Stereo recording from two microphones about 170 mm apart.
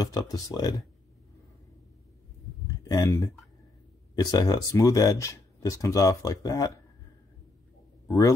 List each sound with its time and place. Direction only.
0.0 s speech: 20° left (ahead or behind)
2.8 s speech: 20° left (ahead or behind)
8.1 s speech: 20° left (ahead or behind)